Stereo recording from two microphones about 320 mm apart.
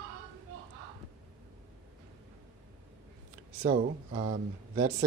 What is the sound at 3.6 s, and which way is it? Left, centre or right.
Speech, centre.